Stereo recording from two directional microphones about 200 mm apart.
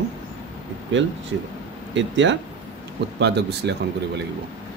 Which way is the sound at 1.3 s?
75° right (ahead or behind).